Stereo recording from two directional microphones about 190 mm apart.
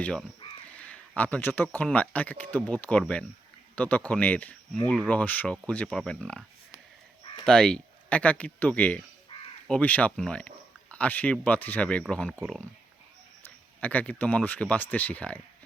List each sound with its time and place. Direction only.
0.0 s speech: 5° left (ahead or behind)
9.3 s crow: 30° left (ahead or behind)
9.6 s speech: 5° left (ahead or behind)
13.8 s speech: 10° left (ahead or behind)